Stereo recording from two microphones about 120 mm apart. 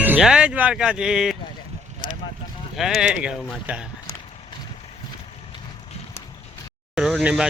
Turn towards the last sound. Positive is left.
turn(degrees=-5)  # may be behind; listen again after turning